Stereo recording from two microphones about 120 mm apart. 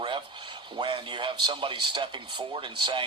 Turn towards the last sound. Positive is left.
turn(degrees=-45)  # may be behind; listen again after turning